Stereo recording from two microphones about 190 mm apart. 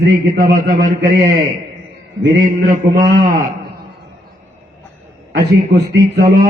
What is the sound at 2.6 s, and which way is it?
Mantra, 45° right (ahead or behind).